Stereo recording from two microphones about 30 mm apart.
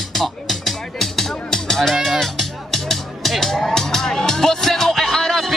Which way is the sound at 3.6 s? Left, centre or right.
Centre.